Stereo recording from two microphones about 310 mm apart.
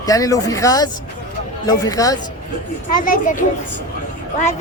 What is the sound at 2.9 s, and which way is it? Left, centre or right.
Speech, left.